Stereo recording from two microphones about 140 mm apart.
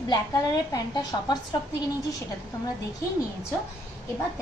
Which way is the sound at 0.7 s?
30° left (ahead or behind).